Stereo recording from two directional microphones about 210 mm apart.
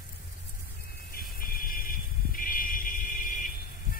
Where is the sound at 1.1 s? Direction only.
45° left (ahead or behind).